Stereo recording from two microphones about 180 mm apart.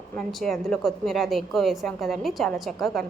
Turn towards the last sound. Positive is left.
turn(degrees=0)  # may be behind; listen again after turning